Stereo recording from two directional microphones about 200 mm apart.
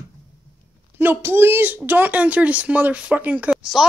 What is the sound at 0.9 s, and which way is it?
Speech, 10° right (ahead or behind).